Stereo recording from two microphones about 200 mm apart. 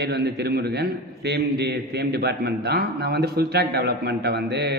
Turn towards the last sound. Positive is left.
turn(degrees=-55)  # may be behind; listen again after turning